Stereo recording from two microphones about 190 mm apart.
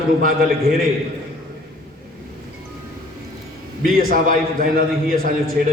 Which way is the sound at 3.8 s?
50° right (ahead or behind).